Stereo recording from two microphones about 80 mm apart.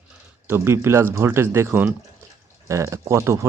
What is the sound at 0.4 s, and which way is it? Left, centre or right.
Speech, right.